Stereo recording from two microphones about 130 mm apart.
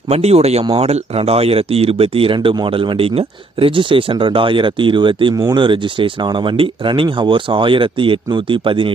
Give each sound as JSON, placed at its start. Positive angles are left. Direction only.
{"t": 0.1, "sound": "speech", "side_deg": -50}